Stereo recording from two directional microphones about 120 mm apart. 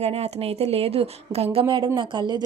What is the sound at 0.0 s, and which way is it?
A woman's voice, 60° right (ahead or behind).